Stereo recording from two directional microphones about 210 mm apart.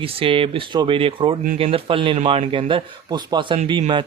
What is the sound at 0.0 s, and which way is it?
Speech, 25° right (ahead or behind).